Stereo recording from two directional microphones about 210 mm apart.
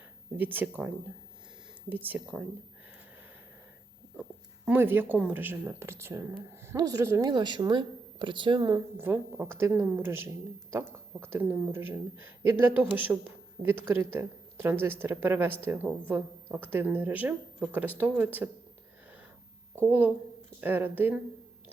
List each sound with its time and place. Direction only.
0.3 s speech: 10° right (ahead or behind)
4.2 s speech: 5° right (ahead or behind)
19.8 s speech: 10° right (ahead or behind)